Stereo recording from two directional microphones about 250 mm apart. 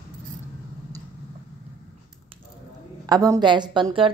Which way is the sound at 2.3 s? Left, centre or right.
Right.